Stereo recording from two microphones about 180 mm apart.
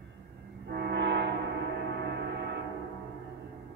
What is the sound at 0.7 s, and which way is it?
Train, 70° right (ahead or behind).